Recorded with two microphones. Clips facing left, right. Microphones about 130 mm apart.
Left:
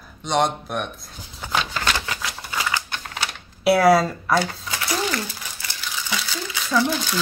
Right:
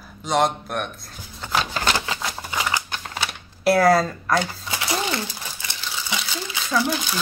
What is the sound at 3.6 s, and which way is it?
A woman's voice, centre (ahead or behind).